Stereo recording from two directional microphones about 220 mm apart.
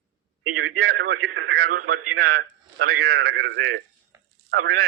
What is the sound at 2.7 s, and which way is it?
A man's voice, 45° right (ahead or behind).